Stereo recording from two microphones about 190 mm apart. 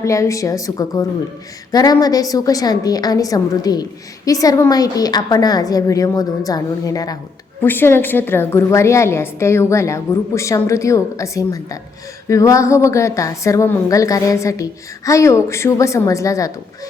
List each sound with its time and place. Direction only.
0.0 s a woman's voice: 15° left (ahead or behind)